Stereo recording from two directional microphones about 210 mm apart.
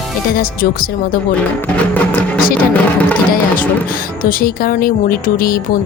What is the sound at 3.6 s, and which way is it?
Speech, 40° left (ahead or behind).